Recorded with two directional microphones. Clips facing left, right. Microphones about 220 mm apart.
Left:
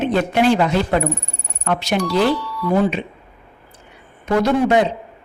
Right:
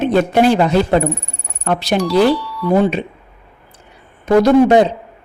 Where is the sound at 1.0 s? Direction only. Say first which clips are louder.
Right 3 dB; centre (ahead or behind).